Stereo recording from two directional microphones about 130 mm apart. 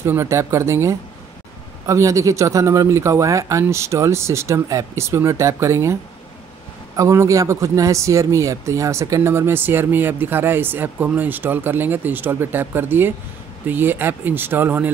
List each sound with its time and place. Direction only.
0.0 s speech: 20° right (ahead or behind)
7.0 s speech: 25° right (ahead or behind)